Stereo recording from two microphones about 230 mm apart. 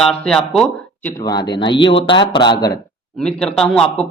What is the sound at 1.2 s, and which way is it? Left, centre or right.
Speech, centre.